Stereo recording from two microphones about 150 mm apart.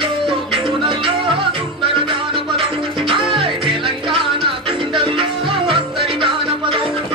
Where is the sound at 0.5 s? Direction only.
35° right (ahead or behind).